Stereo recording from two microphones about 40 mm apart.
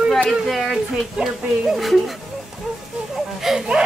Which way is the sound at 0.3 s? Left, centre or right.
Centre.